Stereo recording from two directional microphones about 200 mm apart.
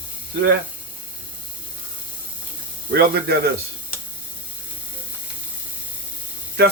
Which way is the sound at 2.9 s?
50° right (ahead or behind).